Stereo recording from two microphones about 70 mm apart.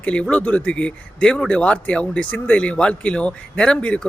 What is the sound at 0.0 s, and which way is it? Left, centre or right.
Speech, centre.